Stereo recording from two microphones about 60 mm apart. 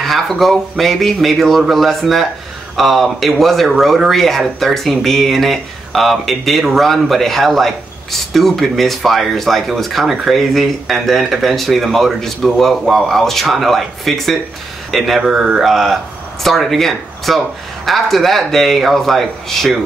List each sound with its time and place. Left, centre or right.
0.0 s speech: centre
15.6 s speech: centre